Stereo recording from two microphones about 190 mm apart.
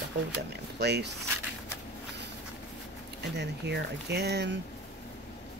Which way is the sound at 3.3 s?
60° right (ahead or behind).